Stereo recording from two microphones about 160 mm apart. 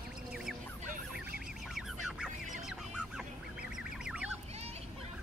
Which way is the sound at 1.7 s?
Centre (ahead or behind).